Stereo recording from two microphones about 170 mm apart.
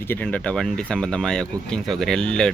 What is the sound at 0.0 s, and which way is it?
Speech, 10° left (ahead or behind).